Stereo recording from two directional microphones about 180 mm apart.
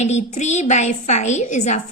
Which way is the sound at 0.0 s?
40° left (ahead or behind).